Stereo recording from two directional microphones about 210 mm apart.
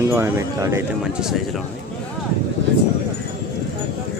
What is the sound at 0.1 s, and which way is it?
Speech, 15° right (ahead or behind).